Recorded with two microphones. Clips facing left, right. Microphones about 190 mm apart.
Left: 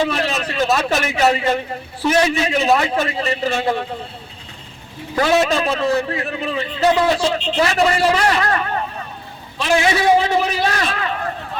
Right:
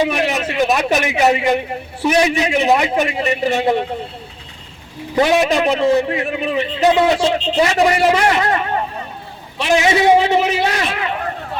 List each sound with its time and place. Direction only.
0.0 s a man's voice: 15° right (ahead or behind)
5.1 s a man's voice: 20° right (ahead or behind)